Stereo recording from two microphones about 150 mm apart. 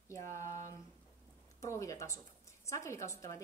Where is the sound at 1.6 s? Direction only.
20° left (ahead or behind).